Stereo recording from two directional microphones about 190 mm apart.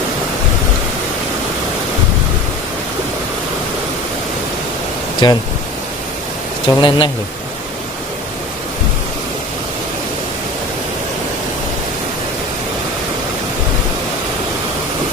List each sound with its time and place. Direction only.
5.2 s speech: 25° left (ahead or behind)
6.7 s speech: 25° left (ahead or behind)